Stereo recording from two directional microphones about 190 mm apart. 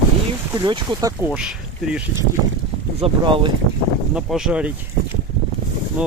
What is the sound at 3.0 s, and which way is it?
Speech, 25° right (ahead or behind).